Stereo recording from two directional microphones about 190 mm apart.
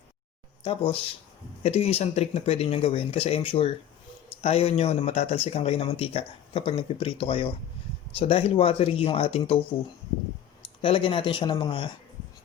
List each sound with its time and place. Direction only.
0.6 s speech: 25° left (ahead or behind)
10.8 s speech: 30° left (ahead or behind)